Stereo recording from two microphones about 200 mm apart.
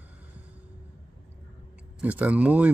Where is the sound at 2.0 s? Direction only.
5° right (ahead or behind).